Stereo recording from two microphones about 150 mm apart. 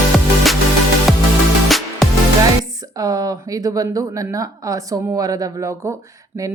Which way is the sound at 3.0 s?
25° right (ahead or behind).